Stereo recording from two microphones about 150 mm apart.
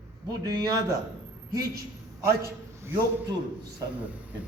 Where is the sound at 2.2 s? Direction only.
20° right (ahead or behind).